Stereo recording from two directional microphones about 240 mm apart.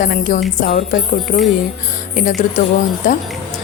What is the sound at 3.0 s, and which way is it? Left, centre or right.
Speech, left.